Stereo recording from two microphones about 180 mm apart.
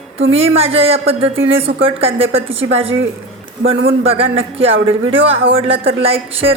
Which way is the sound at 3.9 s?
30° right (ahead or behind).